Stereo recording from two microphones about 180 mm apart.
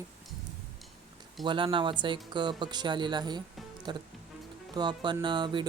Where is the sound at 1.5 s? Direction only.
30° right (ahead or behind).